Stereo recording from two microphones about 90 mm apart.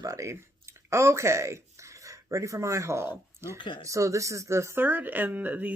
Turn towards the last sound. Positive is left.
turn(degrees=-20)  # may be behind; listen again after turning